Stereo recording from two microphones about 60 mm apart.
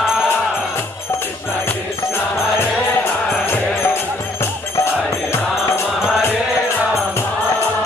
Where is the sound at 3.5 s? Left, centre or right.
Left.